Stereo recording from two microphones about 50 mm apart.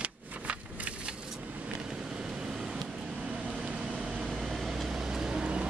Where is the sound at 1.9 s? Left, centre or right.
Centre.